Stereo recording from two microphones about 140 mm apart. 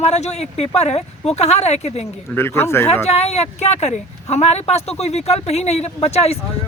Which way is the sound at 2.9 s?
50° left (ahead or behind).